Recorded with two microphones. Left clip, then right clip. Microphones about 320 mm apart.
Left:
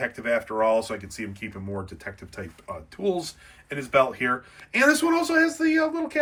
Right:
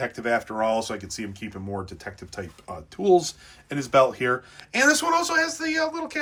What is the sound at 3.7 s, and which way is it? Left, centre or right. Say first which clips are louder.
A man's voice: right 2 dB; centre.